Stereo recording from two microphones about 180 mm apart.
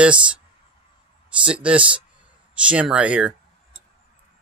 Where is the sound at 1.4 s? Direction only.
5° right (ahead or behind).